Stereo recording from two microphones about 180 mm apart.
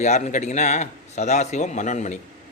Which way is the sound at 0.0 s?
40° left (ahead or behind).